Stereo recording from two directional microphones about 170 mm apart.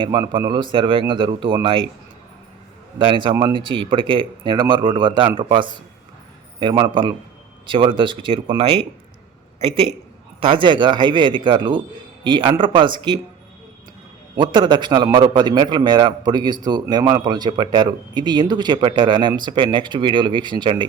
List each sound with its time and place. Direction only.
0.0 s a man's voice: 25° right (ahead or behind)
3.0 s a man's voice: 30° right (ahead or behind)
14.3 s a man's voice: 30° right (ahead or behind)